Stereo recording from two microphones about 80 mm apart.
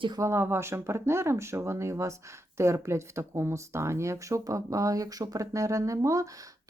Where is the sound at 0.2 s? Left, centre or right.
Right.